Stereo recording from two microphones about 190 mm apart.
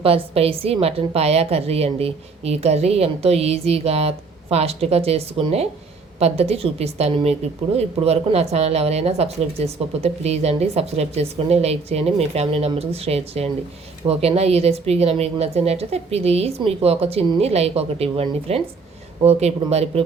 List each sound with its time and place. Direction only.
0.3 s a woman's voice: 30° right (ahead or behind)